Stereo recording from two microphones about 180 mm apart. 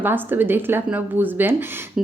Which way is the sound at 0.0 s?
10° right (ahead or behind).